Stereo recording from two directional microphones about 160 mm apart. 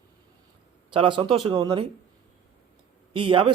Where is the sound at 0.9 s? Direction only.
35° right (ahead or behind).